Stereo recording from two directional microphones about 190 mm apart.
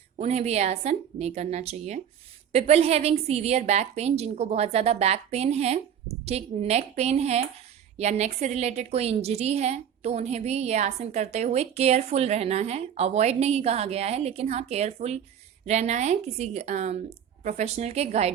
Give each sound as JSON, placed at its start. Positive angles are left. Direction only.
{"t": 0.2, "sound": "a woman's voice", "side_deg": -35}